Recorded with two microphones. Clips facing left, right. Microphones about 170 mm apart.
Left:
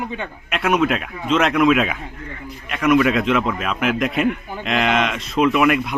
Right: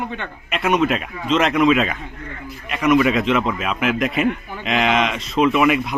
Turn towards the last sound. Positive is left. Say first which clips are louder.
# even
turn(degrees=0)  # may be behind; listen again after turning